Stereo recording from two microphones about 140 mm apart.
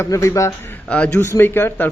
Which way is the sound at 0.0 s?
20° left (ahead or behind).